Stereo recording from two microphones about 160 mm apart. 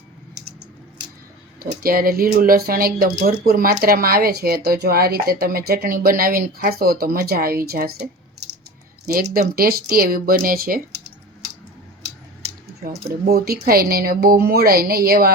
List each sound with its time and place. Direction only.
1.5 s speech: 65° right (ahead or behind)
9.6 s speech: 70° right (ahead or behind)
13.1 s speech: 75° right (ahead or behind)